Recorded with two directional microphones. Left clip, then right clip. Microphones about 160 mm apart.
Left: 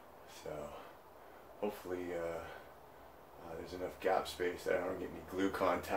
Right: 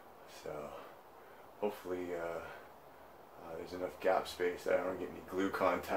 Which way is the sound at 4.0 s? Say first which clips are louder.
Right 2 dB; 25° right (ahead or behind).